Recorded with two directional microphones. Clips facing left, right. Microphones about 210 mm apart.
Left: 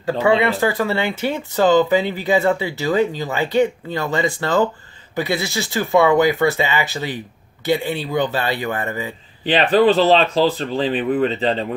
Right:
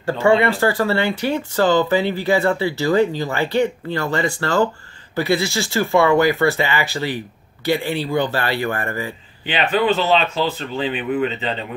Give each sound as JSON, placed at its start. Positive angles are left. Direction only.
{"t": 0.6, "sound": "speech", "side_deg": 20}
{"t": 9.5, "sound": "speech", "side_deg": 35}